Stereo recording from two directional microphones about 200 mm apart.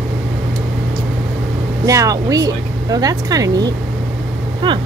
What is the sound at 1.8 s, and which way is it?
Speech, 15° right (ahead or behind).